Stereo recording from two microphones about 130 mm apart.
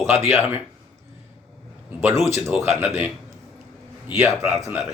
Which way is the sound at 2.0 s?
20° right (ahead or behind).